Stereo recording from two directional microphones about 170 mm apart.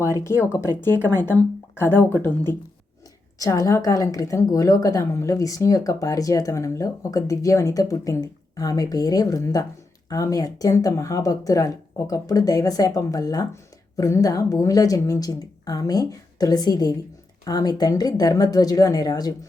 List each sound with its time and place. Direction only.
0.0 s speech: 15° left (ahead or behind)
3.3 s speech: 20° left (ahead or behind)